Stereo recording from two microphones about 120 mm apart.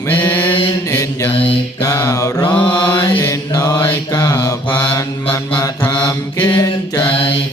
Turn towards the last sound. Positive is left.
turn(degrees=50)  # may be behind; listen again after turning